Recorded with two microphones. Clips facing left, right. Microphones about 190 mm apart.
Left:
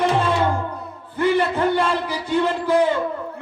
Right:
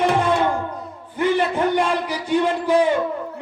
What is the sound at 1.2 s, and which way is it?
Speech, 15° right (ahead or behind).